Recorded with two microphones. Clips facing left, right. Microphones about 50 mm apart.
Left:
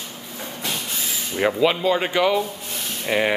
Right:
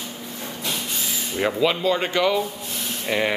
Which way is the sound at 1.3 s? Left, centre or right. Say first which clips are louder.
Left 2 dB; centre.